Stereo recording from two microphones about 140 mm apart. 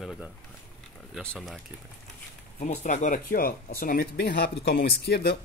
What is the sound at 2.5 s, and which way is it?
Speech, 60° left (ahead or behind).